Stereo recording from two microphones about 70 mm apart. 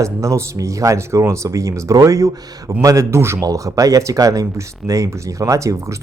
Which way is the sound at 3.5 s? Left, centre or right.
Right.